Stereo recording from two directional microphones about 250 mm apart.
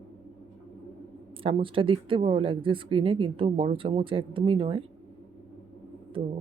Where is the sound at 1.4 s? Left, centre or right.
Right.